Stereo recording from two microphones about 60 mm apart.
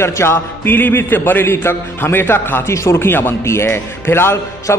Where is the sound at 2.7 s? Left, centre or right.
Left.